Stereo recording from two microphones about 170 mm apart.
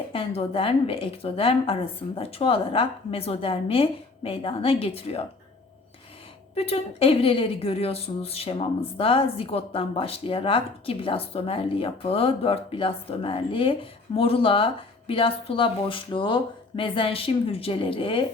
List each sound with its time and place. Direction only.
0.1 s a woman's voice: 35° left (ahead or behind)
6.5 s a woman's voice: 35° left (ahead or behind)